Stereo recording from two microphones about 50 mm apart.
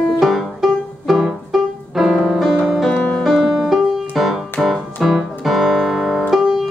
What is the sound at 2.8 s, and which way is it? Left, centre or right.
Music, centre.